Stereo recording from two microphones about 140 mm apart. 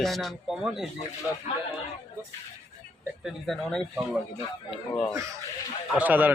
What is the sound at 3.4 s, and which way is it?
Speech, 5° left (ahead or behind).